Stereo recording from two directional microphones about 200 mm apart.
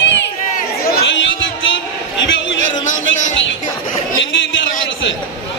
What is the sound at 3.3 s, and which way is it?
Music, 70° left (ahead or behind).